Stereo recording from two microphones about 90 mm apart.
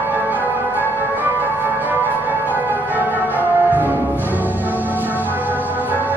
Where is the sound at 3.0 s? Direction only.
20° right (ahead or behind).